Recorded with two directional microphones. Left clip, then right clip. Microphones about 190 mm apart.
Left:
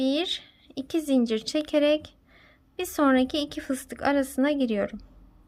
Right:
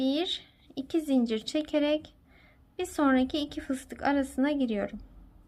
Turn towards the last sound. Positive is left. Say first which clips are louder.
# left 4 dB
turn(degrees=20)  # may be behind; listen again after turning